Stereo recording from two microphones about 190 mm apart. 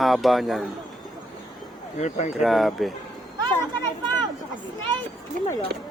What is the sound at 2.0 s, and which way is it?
Speech, 35° left (ahead or behind).